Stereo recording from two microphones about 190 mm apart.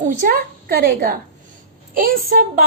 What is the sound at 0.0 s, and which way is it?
A woman's voice, 45° right (ahead or behind).